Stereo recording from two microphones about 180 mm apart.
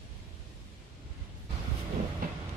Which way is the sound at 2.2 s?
50° right (ahead or behind).